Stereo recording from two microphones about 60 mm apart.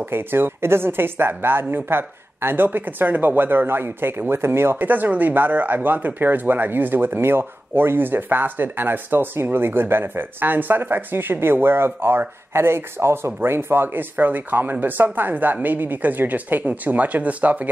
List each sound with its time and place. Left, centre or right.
0.1 s speech: right